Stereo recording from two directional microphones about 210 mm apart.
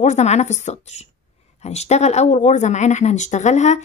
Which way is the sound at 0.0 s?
35° left (ahead or behind).